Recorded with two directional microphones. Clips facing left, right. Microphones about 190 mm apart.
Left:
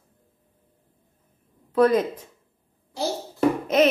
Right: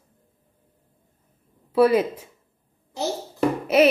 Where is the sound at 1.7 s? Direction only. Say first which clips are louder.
Right 1 dB; 10° right (ahead or behind).